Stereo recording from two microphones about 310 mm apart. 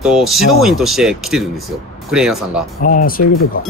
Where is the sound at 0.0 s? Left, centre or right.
Centre.